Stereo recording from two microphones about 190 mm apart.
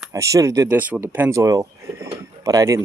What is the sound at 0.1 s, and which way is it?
Speech, 15° right (ahead or behind).